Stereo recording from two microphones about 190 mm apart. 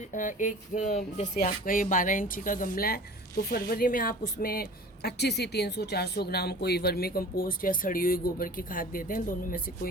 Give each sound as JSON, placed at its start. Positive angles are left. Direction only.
{"t": 0.1, "sound": "music", "side_deg": 45}